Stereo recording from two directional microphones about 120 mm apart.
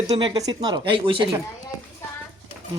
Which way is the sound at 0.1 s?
35° right (ahead or behind).